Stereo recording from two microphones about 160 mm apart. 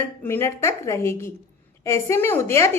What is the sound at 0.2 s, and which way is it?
A woman's voice, 15° left (ahead or behind).